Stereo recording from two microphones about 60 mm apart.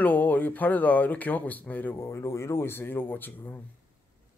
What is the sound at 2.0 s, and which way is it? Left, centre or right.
A man's voice, left.